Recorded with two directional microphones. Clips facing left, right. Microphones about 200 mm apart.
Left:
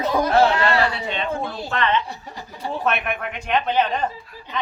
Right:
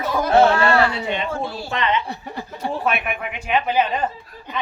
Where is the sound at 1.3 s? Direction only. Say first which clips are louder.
Even; 20° left (ahead or behind).